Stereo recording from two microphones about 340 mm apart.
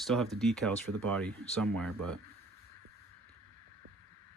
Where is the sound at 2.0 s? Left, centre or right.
Right.